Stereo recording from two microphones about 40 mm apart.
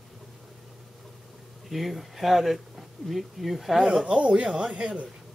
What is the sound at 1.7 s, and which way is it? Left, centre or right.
Speech, centre.